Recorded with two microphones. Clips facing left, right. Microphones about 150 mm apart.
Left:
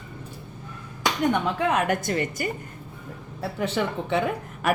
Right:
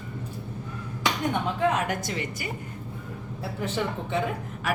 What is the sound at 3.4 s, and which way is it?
Speech, 80° left.